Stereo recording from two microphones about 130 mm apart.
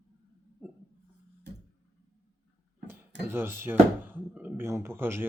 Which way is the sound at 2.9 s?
15° right (ahead or behind).